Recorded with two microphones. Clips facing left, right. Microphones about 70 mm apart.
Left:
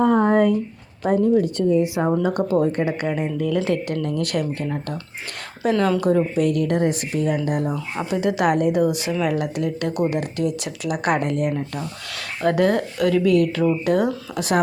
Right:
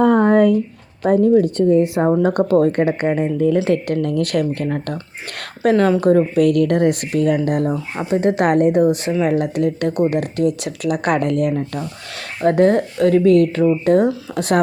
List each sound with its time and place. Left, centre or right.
0.0 s a sound: right
1.0 s speech: right
3.0 s speech: right
4.0 s speech: right
7.7 s speech: right
8.2 s speech: right
12.4 s speech: right
14.3 s speech: right